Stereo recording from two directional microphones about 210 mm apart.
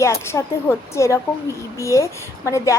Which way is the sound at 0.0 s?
15° left (ahead or behind).